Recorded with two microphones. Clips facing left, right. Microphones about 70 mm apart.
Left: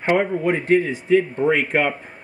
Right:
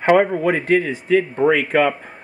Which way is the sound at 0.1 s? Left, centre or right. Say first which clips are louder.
Right 4 dB; right.